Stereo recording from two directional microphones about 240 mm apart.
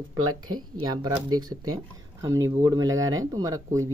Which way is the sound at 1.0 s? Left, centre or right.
Centre.